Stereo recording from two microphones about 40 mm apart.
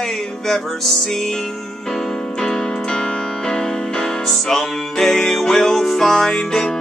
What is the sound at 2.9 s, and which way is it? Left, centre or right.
Music, centre.